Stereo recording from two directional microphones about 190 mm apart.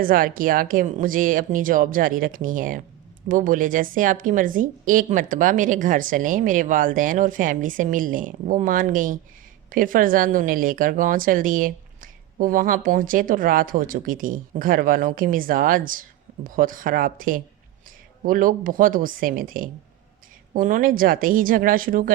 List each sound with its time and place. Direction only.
0.0 s a woman's voice: 50° right (ahead or behind)